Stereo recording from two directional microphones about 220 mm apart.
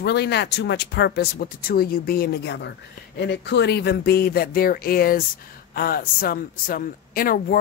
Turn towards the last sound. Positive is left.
turn(degrees=40)  # may be behind; listen again after turning